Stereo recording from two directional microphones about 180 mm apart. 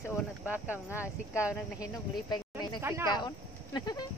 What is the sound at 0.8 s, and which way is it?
Speech, 15° left (ahead or behind).